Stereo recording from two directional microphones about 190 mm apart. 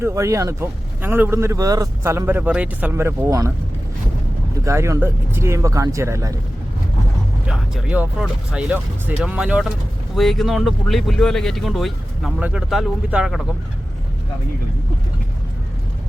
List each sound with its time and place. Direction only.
0.0 s speech: 15° right (ahead or behind)
4.6 s speech: 15° right (ahead or behind)
7.4 s speech: 5° right (ahead or behind)